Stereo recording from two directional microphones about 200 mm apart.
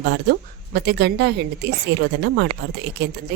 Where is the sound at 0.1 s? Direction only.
55° right (ahead or behind).